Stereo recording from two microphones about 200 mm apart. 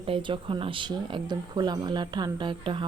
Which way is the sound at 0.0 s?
25° right (ahead or behind).